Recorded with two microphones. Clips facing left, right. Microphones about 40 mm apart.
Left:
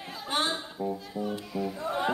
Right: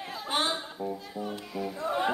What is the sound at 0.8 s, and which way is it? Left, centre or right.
Music, centre.